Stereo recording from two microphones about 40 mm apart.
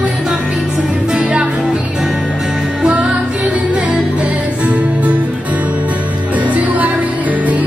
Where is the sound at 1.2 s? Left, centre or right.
Right.